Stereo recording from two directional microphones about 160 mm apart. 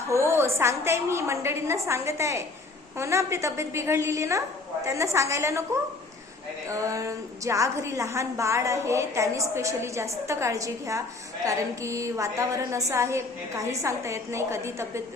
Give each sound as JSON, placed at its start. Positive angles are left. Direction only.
{"t": 0.1, "sound": "a woman's voice", "side_deg": -15}
{"t": 6.7, "sound": "a woman's voice", "side_deg": -20}